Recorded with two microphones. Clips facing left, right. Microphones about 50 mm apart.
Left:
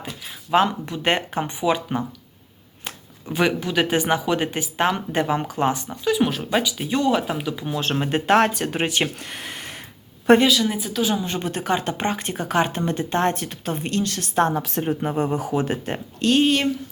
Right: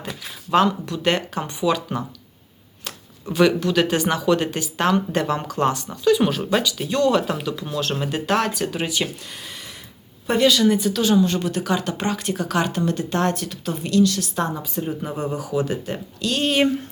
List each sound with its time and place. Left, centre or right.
0.5 s speech: centre
3.3 s speech: centre
7.8 s speech: left
10.4 s speech: centre
11.3 s speech: left
14.6 s speech: left
15.1 s speech: left